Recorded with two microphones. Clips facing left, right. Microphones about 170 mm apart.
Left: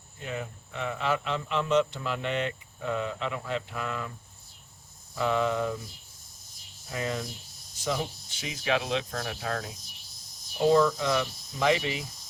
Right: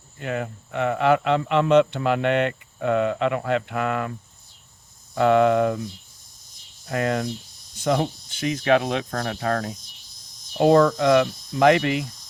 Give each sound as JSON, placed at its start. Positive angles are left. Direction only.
{"t": 0.2, "sound": "speech", "side_deg": -65}
{"t": 5.1, "sound": "speech", "side_deg": -65}
{"t": 6.8, "sound": "speech", "side_deg": -70}